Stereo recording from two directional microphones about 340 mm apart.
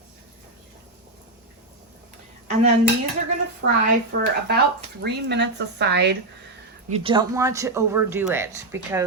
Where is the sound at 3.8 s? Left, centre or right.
Right.